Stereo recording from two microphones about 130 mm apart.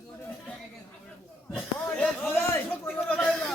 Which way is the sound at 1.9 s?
10° left (ahead or behind).